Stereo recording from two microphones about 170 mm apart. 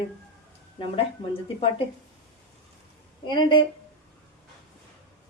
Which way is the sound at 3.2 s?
25° left (ahead or behind).